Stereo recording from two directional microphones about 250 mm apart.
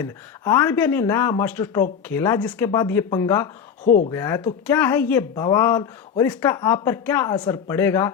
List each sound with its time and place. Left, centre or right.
0.0 s speech: centre
3.8 s speech: left
4.1 s speech: centre